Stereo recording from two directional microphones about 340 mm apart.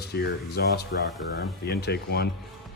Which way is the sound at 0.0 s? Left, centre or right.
Left.